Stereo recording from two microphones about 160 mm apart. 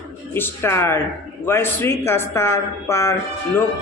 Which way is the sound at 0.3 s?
15° left (ahead or behind).